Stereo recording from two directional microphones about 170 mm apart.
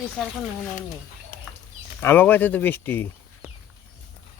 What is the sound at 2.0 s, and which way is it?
Speech, 10° left (ahead or behind).